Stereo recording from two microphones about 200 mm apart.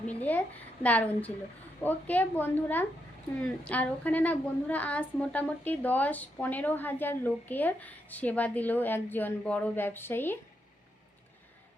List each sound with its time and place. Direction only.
0.1 s a woman's voice: 10° left (ahead or behind)